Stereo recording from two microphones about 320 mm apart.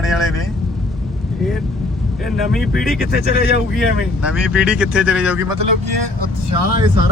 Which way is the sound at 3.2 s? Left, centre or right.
Left.